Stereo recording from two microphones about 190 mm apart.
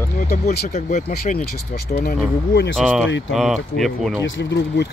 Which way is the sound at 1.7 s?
55° left (ahead or behind).